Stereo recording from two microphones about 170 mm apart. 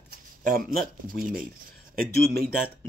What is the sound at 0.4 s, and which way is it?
Speech, 55° right (ahead or behind).